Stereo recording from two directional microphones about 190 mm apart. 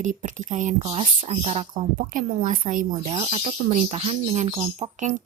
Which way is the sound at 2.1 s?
45° right (ahead or behind).